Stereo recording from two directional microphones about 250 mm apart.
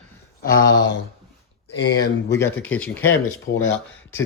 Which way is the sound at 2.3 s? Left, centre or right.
Centre.